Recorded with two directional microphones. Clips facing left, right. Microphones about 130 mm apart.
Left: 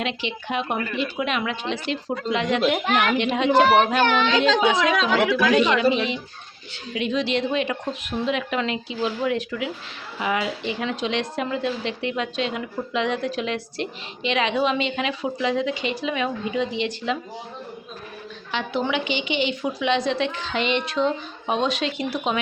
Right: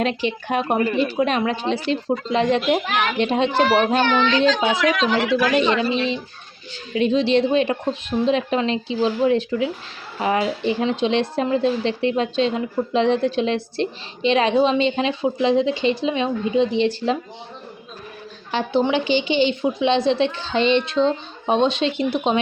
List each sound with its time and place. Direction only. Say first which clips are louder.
0.0 s a woman's voice: right 6 dB; 40° right (ahead or behind)
5.3 s speech: right 1 dB; 30° right (ahead or behind)
18.5 s a woman's voice: right 5 dB; 30° right (ahead or behind)